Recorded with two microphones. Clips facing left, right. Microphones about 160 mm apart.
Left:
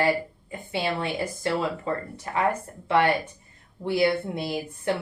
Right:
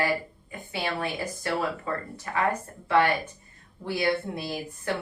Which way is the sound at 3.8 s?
25° left (ahead or behind).